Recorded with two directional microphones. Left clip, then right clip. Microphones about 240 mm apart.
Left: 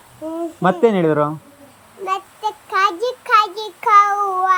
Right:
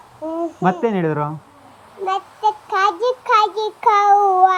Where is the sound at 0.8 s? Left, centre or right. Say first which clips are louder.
Left 5 dB; left.